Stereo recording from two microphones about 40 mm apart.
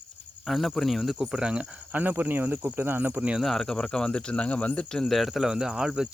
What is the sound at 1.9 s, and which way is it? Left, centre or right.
Speech, right.